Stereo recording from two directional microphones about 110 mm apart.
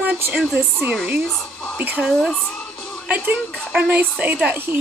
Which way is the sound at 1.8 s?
15° right (ahead or behind).